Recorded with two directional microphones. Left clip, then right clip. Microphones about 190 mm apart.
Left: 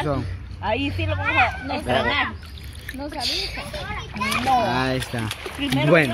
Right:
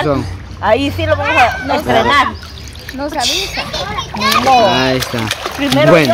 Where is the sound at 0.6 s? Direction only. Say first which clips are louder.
Right 12 dB; 20° right (ahead or behind).